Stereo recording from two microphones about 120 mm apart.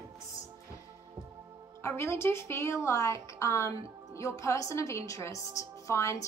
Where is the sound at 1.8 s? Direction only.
20° left (ahead or behind).